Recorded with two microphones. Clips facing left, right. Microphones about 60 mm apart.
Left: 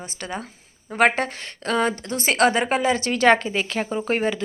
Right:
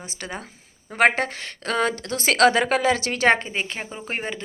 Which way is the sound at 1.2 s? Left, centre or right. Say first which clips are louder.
Even; right.